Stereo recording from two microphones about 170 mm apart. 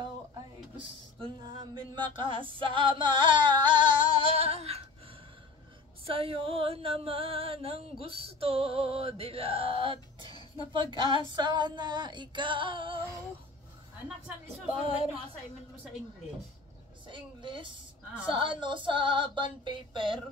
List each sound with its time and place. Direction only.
1.2 s a sound: 25° right (ahead or behind)
2.0 s music: 30° right (ahead or behind)
6.0 s music: 35° right (ahead or behind)
14.7 s music: 30° right (ahead or behind)
17.1 s a woman's voice: 30° right (ahead or behind)
18.2 s music: 30° right (ahead or behind)